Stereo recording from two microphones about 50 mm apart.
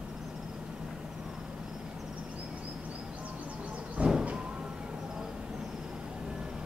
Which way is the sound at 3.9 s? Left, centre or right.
Right.